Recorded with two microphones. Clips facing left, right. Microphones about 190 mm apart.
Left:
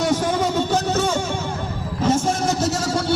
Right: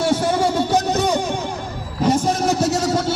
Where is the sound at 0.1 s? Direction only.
10° right (ahead or behind).